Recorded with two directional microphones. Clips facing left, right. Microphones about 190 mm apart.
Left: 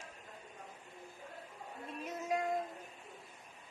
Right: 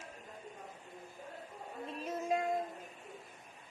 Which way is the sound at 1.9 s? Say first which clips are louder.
Right 2 dB; 30° right (ahead or behind).